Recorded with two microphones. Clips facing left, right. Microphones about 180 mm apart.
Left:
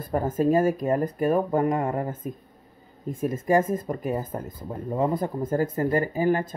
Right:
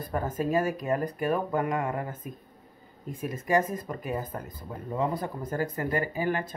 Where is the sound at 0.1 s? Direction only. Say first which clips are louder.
Left 6 dB; 45° left (ahead or behind).